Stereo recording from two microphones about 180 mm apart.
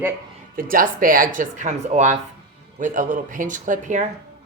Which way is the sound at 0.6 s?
50° right (ahead or behind).